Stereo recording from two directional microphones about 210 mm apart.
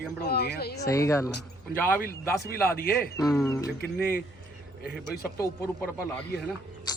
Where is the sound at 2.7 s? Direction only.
45° left (ahead or behind).